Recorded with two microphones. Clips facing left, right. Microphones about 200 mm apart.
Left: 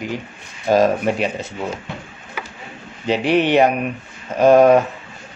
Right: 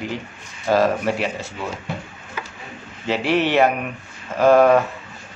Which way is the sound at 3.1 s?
15° left (ahead or behind).